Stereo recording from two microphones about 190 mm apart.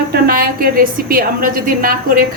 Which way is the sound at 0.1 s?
50° right (ahead or behind).